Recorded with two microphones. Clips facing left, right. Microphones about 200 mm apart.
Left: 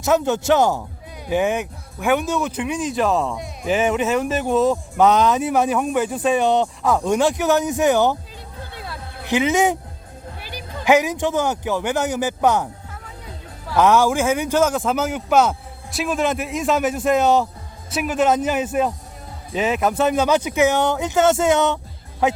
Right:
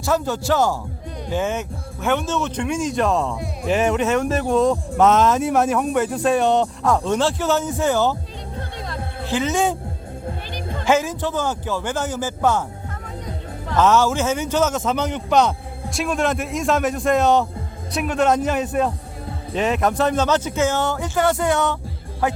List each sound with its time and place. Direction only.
0.0 s speech: 20° left (ahead or behind); by 7.0 s centre (ahead or behind)
7.0 s speech: 15° left (ahead or behind)
9.2 s speech: 15° left (ahead or behind)
13.7 s speech: 10° left (ahead or behind)